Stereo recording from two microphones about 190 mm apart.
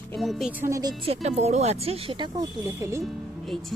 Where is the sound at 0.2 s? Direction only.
Centre (ahead or behind).